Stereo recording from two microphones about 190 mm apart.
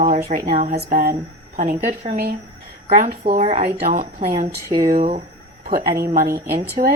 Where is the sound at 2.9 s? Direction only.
45° right (ahead or behind).